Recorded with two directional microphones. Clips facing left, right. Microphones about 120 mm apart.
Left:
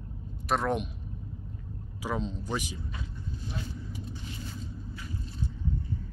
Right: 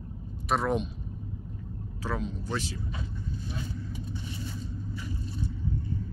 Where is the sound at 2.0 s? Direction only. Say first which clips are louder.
Left 1 dB; 20° left (ahead or behind).